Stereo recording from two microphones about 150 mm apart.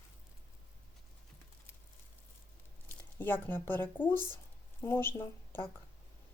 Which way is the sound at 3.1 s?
15° left (ahead or behind).